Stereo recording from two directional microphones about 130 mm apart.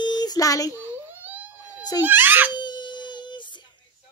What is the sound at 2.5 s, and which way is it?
Baby cry, 35° left (ahead or behind).